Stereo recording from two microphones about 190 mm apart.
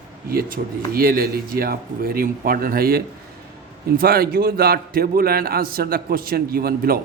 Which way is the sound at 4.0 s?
50° right (ahead or behind).